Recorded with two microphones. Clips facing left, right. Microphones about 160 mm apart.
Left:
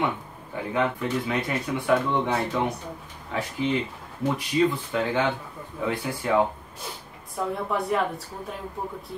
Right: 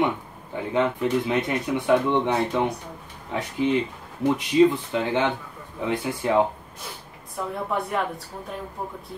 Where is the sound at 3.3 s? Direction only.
20° right (ahead or behind).